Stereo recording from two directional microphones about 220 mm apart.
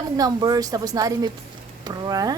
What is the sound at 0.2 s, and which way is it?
A woman's voice, 15° right (ahead or behind).